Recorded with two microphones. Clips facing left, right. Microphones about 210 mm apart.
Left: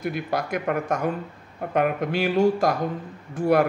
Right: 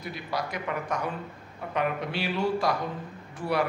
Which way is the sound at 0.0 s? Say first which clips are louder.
Left 6 dB; 55° left (ahead or behind).